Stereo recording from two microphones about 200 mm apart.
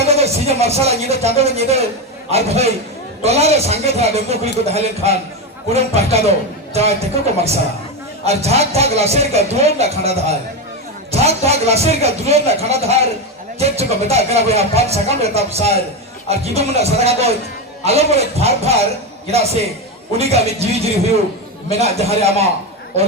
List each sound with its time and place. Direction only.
0.0 s speech: 30° right (ahead or behind)
20.1 s speech: 30° right (ahead or behind)